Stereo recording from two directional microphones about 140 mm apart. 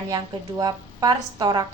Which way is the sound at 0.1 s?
25° right (ahead or behind).